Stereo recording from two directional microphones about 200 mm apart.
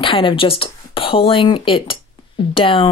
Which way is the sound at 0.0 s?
25° left (ahead or behind).